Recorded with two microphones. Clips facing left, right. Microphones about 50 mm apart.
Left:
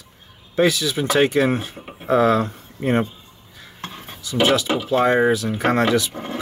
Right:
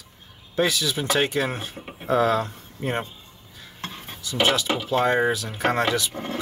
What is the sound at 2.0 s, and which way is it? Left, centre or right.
Speech, centre.